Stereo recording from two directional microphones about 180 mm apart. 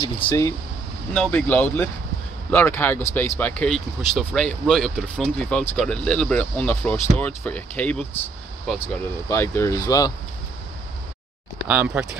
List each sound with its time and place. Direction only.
0.0 s speech: 20° left (ahead or behind)
1.1 s speech: 10° left (ahead or behind)
11.6 s speech: 10° right (ahead or behind)